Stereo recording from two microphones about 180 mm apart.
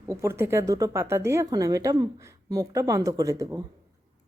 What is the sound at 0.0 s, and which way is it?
Speech, 15° right (ahead or behind).